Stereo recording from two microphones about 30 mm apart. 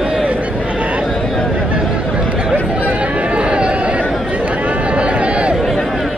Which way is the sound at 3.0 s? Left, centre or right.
Right.